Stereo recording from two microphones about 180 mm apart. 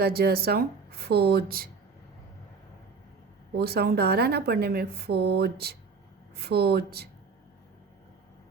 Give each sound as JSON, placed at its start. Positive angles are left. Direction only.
{"t": 0.0, "sound": "speech", "side_deg": -60}
{"t": 3.5, "sound": "speech", "side_deg": -60}